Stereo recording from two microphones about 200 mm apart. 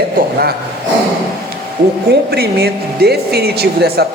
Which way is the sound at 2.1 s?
55° right (ahead or behind).